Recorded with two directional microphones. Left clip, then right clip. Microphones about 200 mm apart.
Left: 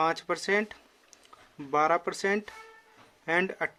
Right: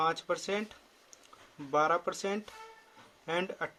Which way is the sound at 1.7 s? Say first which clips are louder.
Left 3 dB; 30° left (ahead or behind).